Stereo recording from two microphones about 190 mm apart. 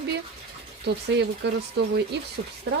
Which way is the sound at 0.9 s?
60° right (ahead or behind).